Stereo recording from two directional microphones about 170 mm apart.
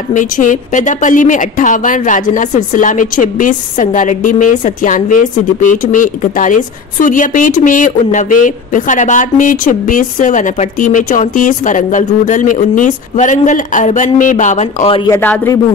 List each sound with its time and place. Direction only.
0.1 s a woman's voice: 50° left (ahead or behind)
15.0 s speech: 10° left (ahead or behind)